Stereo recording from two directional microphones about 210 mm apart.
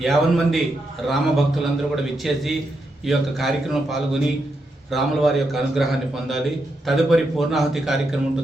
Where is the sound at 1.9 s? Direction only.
Centre (ahead or behind).